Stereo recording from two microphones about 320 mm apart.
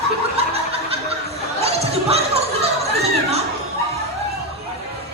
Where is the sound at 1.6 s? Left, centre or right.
Centre.